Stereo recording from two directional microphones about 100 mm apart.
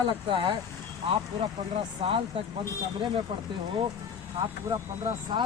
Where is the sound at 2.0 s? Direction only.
75° right (ahead or behind).